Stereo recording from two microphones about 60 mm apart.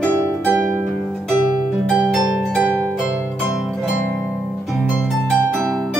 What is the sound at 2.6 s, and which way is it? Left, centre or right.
Harp, right.